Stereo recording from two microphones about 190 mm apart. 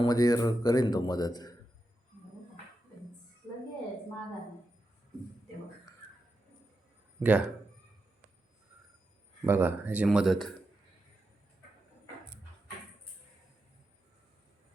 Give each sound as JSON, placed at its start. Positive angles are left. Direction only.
{"t": 0.0, "sound": "speech", "side_deg": 20}
{"t": 7.2, "sound": "speech", "side_deg": -5}
{"t": 9.5, "sound": "speech", "side_deg": -10}